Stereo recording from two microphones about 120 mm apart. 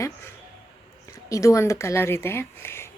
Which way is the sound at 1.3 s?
25° left (ahead or behind).